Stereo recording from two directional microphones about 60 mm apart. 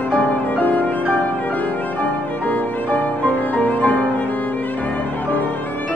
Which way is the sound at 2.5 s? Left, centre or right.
Left.